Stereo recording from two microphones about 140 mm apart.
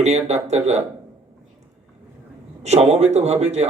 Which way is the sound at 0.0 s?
55° right (ahead or behind).